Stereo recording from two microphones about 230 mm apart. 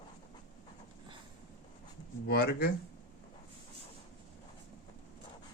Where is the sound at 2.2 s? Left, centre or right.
Left.